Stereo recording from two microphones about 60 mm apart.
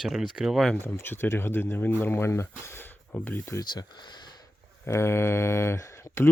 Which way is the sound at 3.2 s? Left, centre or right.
Left.